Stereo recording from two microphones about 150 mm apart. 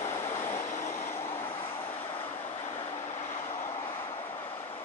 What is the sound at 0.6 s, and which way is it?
Vehicle, 55° left (ahead or behind).